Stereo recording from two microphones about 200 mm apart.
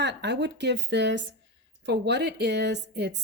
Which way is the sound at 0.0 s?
60° right (ahead or behind).